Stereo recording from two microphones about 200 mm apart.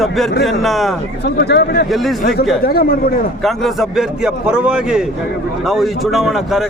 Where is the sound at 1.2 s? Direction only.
55° left (ahead or behind).